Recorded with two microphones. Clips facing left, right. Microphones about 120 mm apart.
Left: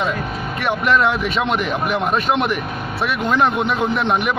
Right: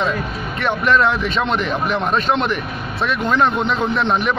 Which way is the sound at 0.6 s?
15° left (ahead or behind).